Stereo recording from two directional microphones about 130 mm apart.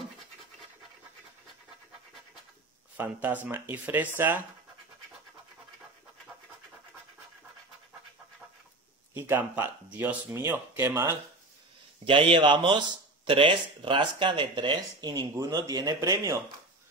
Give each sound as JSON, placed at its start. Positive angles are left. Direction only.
{"t": 3.0, "sound": "speech", "side_deg": -15}
{"t": 9.1, "sound": "speech", "side_deg": -15}
{"t": 12.0, "sound": "speech", "side_deg": -40}